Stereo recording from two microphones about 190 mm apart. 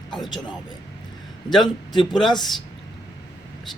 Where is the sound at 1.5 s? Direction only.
Centre (ahead or behind).